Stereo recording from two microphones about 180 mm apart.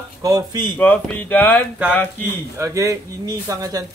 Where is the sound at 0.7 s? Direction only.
10° left (ahead or behind).